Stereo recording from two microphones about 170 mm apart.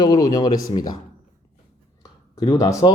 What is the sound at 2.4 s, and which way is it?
Speech, 20° left (ahead or behind).